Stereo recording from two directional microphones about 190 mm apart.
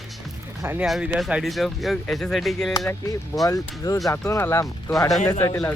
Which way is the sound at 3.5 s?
15° left (ahead or behind).